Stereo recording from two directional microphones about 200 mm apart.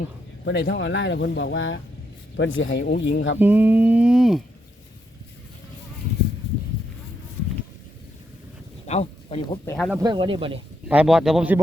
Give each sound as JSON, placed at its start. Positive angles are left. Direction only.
{"t": 0.4, "sound": "speech", "side_deg": 70}
{"t": 3.3, "sound": "speech", "side_deg": -10}
{"t": 8.9, "sound": "a sound", "side_deg": 30}
{"t": 9.7, "sound": "speech", "side_deg": 0}
{"t": 10.0, "sound": "speech", "side_deg": -20}
{"t": 10.8, "sound": "speech", "side_deg": -5}